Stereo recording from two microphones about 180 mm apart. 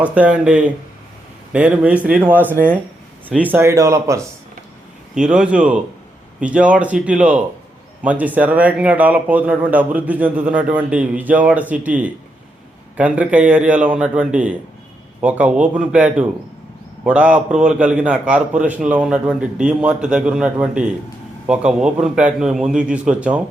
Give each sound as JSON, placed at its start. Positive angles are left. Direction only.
{"t": 0.0, "sound": "a man's voice", "side_deg": -5}
{"t": 5.1, "sound": "a man's voice", "side_deg": -5}